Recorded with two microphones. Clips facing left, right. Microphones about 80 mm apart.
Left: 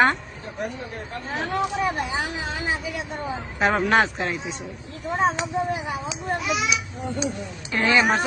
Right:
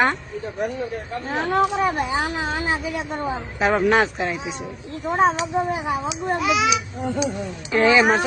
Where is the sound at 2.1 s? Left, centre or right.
Right.